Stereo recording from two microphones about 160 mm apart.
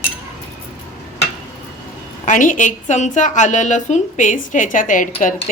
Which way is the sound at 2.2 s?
55° left (ahead or behind).